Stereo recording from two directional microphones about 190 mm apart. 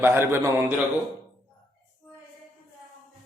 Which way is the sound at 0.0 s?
10° right (ahead or behind).